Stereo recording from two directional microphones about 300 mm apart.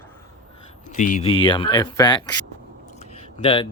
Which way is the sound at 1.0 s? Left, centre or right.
Left.